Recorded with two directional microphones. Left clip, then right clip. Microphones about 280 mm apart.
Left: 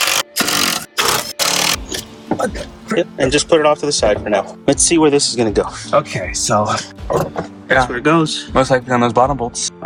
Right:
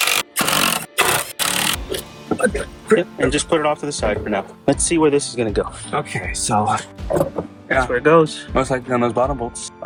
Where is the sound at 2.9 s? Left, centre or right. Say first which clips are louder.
Left 2 dB; centre.